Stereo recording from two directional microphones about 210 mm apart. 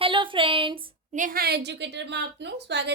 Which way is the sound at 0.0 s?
25° right (ahead or behind).